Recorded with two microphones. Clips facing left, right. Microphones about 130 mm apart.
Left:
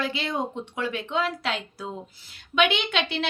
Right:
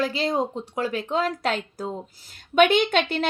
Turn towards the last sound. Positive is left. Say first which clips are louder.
# right 6 dB
turn(degrees=-45)  # may be behind; listen again after turning